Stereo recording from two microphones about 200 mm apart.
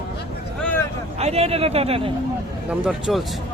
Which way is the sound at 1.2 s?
30° right (ahead or behind).